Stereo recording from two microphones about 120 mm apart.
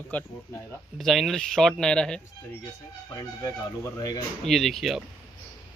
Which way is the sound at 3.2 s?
25° left (ahead or behind).